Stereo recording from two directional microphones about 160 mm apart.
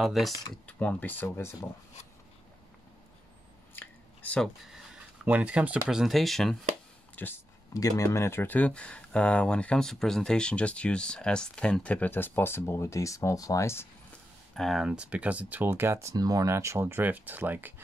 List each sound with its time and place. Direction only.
0.0 s speech: centre (ahead or behind)
3.7 s drip: 10° left (ahead or behind)
4.9 s speech: 10° right (ahead or behind)
7.2 s speech: 15° left (ahead or behind)
14.5 s speech: centre (ahead or behind)